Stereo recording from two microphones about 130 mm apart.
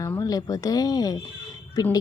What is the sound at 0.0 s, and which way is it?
Speech, 25° left (ahead or behind).